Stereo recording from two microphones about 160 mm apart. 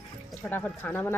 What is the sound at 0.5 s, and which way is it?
Speech, 15° left (ahead or behind).